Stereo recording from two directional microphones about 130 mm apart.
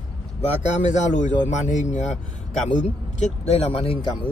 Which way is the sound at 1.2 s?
70° left (ahead or behind).